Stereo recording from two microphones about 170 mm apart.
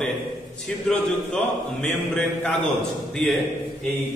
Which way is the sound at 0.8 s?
5° left (ahead or behind).